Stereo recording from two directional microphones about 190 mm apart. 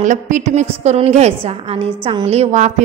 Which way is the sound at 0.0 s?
40° right (ahead or behind).